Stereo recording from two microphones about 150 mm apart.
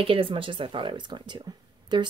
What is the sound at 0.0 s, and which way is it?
Speech, 35° right (ahead or behind).